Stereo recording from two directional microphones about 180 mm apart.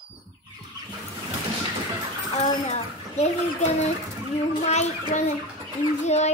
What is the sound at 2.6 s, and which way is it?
Speech, 40° left (ahead or behind).